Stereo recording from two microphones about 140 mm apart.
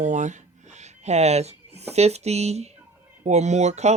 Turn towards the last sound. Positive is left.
turn(degrees=-55)  # may be behind; listen again after turning